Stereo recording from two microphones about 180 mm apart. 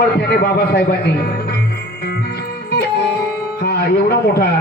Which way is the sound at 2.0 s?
60° left (ahead or behind).